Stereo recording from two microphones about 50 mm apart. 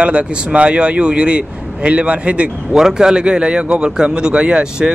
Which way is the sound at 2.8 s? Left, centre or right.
Centre.